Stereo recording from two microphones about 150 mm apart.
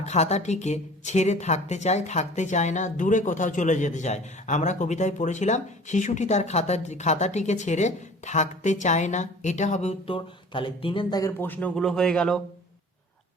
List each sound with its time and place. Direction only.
0.0 s speech: 50° left (ahead or behind); by 11.3 s 30° left (ahead or behind)
11.3 s speech: 10° left (ahead or behind)